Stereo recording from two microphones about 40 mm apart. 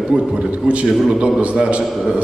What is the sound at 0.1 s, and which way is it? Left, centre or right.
A man's voice, right.